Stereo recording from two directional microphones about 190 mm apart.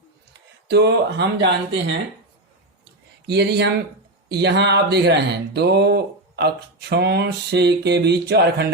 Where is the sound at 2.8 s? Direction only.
60° right (ahead or behind).